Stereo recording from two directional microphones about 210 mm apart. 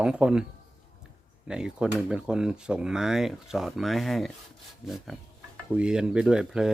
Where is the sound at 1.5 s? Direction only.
5° right (ahead or behind).